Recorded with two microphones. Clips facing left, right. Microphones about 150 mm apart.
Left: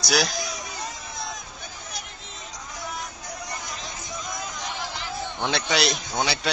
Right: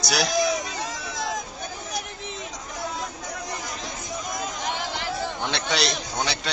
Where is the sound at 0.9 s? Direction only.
90° right.